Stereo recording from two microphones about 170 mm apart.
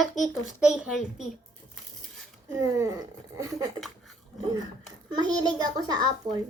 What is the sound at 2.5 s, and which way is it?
Speech, 20° right (ahead or behind).